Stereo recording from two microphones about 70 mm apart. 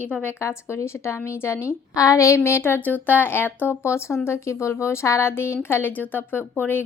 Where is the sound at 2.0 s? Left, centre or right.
Left.